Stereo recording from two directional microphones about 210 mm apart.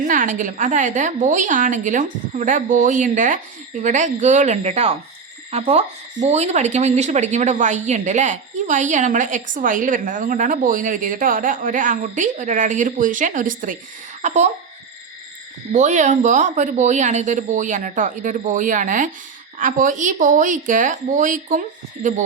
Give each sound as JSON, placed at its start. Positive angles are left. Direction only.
{"t": 0.1, "sound": "speech", "side_deg": -40}
{"t": 15.7, "sound": "speech", "side_deg": -35}